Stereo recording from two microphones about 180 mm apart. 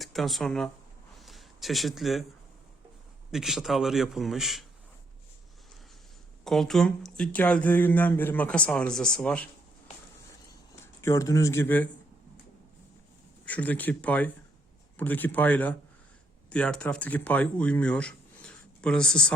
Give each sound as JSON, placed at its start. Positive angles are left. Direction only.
{"t": 0.0, "sound": "speech", "side_deg": 0}
{"t": 1.2, "sound": "a sound", "side_deg": 0}
{"t": 3.3, "sound": "speech", "side_deg": 0}
{"t": 6.4, "sound": "speech", "side_deg": 0}
{"t": 11.0, "sound": "speech", "side_deg": 15}
{"t": 13.4, "sound": "speech", "side_deg": 10}